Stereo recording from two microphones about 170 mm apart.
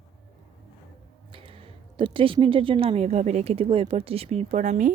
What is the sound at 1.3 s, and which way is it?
Speech, 30° right (ahead or behind).